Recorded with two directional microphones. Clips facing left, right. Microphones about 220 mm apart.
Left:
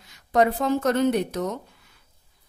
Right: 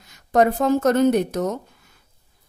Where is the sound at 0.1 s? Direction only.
45° right (ahead or behind).